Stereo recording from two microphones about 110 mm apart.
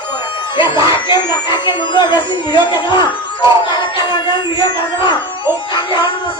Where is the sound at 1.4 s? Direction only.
45° left (ahead or behind).